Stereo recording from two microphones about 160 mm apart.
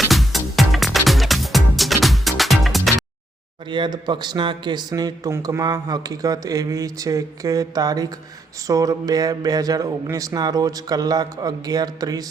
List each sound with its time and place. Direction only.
0.1 s music: centre (ahead or behind)
3.7 s a man's voice: 30° right (ahead or behind)